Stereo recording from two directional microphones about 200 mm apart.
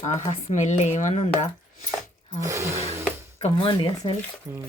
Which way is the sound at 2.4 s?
15° right (ahead or behind).